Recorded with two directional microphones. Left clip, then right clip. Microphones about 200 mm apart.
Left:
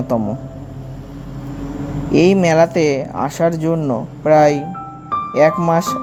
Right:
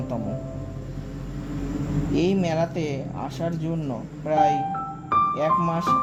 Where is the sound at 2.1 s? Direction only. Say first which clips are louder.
Left 12 dB; 20° left (ahead or behind).